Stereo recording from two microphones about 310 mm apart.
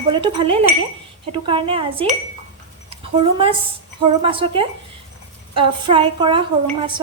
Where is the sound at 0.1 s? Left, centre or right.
Centre.